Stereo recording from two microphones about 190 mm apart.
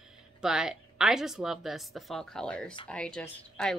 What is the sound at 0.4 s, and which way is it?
A woman's voice, 5° right (ahead or behind).